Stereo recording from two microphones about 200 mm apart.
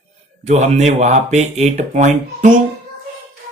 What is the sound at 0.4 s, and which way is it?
Speech, 35° right (ahead or behind).